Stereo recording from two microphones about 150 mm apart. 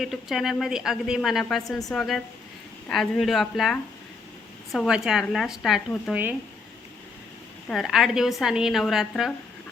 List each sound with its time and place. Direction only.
0.0 s a woman's voice: centre (ahead or behind)
7.7 s a woman's voice: centre (ahead or behind)